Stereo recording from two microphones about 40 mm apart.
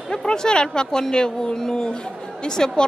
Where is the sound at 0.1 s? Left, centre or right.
Centre.